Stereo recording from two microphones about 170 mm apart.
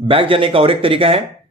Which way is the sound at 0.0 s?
30° right (ahead or behind).